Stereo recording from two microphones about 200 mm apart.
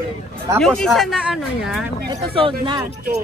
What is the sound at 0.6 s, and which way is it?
A man's voice, 5° left (ahead or behind).